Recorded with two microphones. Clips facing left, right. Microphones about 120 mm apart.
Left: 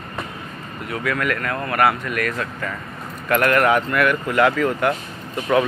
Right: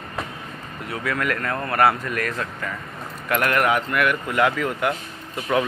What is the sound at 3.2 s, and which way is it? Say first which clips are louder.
Speech: left 4 dB; 15° right (ahead or behind).